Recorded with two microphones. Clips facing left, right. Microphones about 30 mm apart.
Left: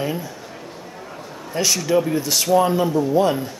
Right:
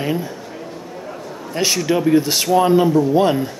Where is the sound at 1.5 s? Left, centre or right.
Right.